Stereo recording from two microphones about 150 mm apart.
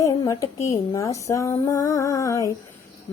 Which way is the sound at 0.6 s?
20° left (ahead or behind).